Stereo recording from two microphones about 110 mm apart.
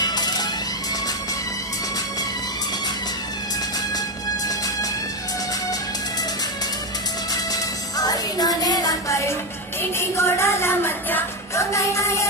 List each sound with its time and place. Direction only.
0.0 s music: 40° left (ahead or behind)
8.0 s music: 35° left (ahead or behind)
9.9 s speech: 25° left (ahead or behind)